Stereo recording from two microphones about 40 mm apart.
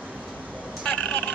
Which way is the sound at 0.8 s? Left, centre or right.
Left.